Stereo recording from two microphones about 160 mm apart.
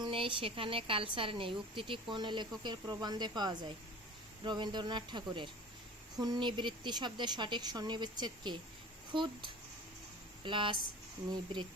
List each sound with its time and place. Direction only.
0.0 s a woman's voice: 35° right (ahead or behind)